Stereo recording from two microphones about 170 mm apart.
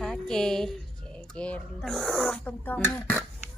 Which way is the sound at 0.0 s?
5° left (ahead or behind).